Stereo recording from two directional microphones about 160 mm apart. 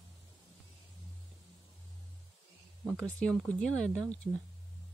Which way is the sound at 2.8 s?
15° right (ahead or behind).